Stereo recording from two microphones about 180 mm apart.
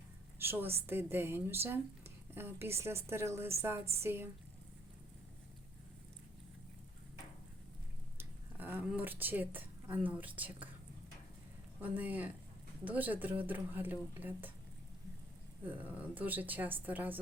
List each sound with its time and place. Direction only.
0.3 s a sound: 10° right (ahead or behind)
0.8 s a woman's voice: 15° right (ahead or behind)
8.2 s speech: 10° right (ahead or behind)
11.8 s a woman's voice: 10° right (ahead or behind)
15.9 s a woman's voice: 10° right (ahead or behind)